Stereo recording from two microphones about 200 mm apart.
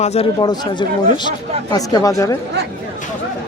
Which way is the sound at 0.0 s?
35° left (ahead or behind).